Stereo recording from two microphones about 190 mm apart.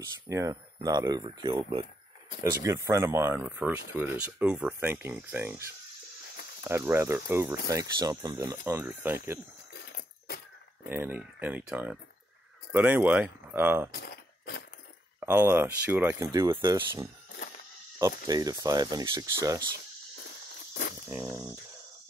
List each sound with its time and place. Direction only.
0.3 s speech: 15° right (ahead or behind)
2.6 s speech: 15° right (ahead or behind)
6.7 s speech: 15° right (ahead or behind)
9.9 s a sound: 55° left (ahead or behind)
10.9 s speech: 10° right (ahead or behind)
13.9 s a sound: 55° left (ahead or behind)
15.1 s speech: 10° right (ahead or behind)
21.1 s speech: 10° right (ahead or behind)